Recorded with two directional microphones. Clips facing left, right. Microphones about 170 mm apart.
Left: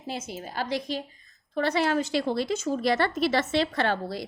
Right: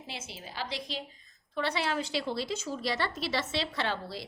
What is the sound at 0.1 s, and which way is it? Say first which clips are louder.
A woman's voice: left 9 dB; 45° left (ahead or behind).